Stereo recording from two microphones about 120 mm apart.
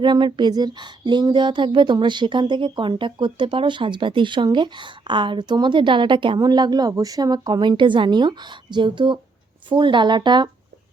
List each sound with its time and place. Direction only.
0.0 s speech: 40° right (ahead or behind)